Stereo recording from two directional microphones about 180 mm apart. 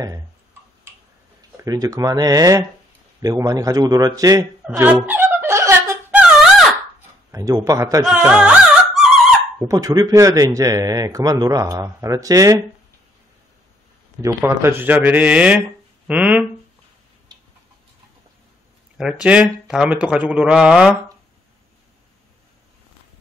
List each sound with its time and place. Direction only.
1.6 s a man's voice: 20° right (ahead or behind)
4.6 s a man's voice: 10° right (ahead or behind)
5.0 s wail: 10° right (ahead or behind)
7.2 s a man's voice: 20° right (ahead or behind)
8.3 s music: 5° right (ahead or behind)
9.7 s a man's voice: 20° right (ahead or behind)
14.2 s a man's voice: 15° right (ahead or behind)
17.3 s tick-tock: 25° right (ahead or behind)
18.9 s a man's voice: 5° right (ahead or behind)